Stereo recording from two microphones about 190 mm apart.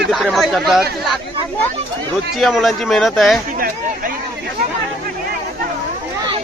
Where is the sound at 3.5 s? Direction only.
50° right (ahead or behind).